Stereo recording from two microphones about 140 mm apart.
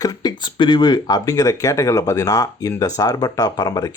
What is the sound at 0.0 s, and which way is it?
Speech, 30° left (ahead or behind).